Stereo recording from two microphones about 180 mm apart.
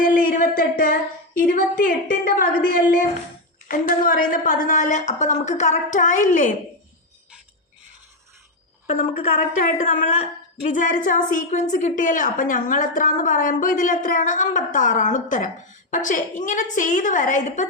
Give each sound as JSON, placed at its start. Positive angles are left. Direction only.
{"t": 0.0, "sound": "a sound", "side_deg": 50}
{"t": 1.4, "sound": "a woman's voice", "side_deg": 50}
{"t": 3.7, "sound": "a woman's voice", "side_deg": 50}
{"t": 8.9, "sound": "a woman's voice", "side_deg": 45}